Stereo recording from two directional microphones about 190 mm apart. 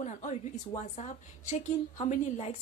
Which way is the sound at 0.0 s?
40° left (ahead or behind).